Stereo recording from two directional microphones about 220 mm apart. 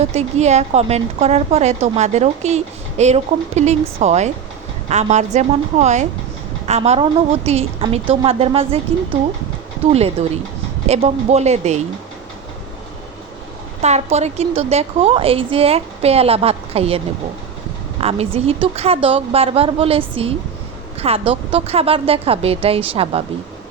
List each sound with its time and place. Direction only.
0.0 s a woman's voice: 30° right (ahead or behind)
9.9 s a woman's voice: 30° right (ahead or behind)
13.8 s a woman's voice: 30° right (ahead or behind)
18.0 s a woman's voice: 25° right (ahead or behind)